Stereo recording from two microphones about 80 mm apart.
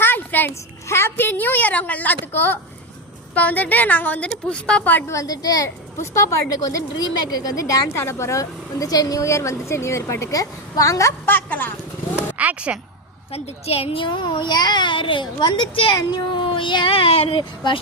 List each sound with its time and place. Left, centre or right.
0.0 s a sound: left
0.9 s a woman's voice: left
5.0 s a woman's voice: left
5.6 s speech: left
6.6 s speech: left
11.3 s a woman's voice: left
12.1 s a sound: centre
13.9 s a child's voice: left
16.0 s speech: left